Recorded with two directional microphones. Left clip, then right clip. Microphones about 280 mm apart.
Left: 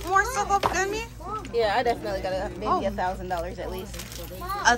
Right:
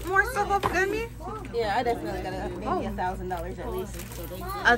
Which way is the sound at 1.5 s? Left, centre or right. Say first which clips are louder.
Left 3 dB; left.